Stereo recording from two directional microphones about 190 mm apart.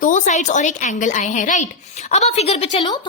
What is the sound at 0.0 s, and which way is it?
A woman's voice, 40° left (ahead or behind).